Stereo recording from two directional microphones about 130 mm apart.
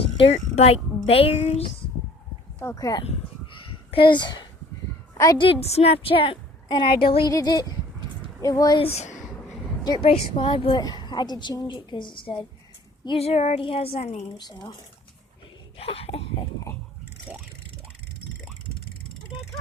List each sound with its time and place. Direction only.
0.0 s a sound: 45° left (ahead or behind)
0.5 s a woman's voice: 50° left (ahead or behind)
2.6 s speech: 25° left (ahead or behind)
3.0 s a sound: 50° left (ahead or behind)
5.1 s a woman's voice: 25° left (ahead or behind)
5.4 s a woman's voice: 50° left (ahead or behind)
7.3 s speech: 30° left (ahead or behind)
8.8 s speech: 55° left (ahead or behind)
10.0 s a woman's voice: 45° left (ahead or behind)
13.1 s speech: 55° left (ahead or behind)
13.6 s a woman's voice: 45° left (ahead or behind)
14.3 s a woman's voice: 35° left (ahead or behind)
15.8 s a woman's voice: 50° left (ahead or behind)